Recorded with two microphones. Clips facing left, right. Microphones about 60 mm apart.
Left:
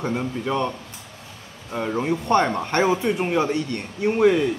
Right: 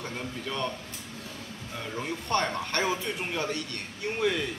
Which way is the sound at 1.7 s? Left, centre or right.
Left.